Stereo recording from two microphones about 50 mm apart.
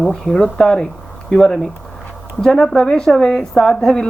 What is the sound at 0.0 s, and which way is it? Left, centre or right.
A woman's voice, left.